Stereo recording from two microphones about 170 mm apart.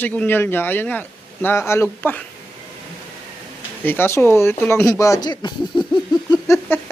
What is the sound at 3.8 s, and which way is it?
Speech, 10° left (ahead or behind).